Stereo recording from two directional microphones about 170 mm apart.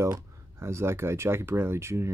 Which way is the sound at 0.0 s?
15° right (ahead or behind).